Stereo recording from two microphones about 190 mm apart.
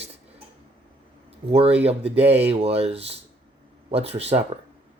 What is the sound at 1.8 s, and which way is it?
Speech, 30° right (ahead or behind).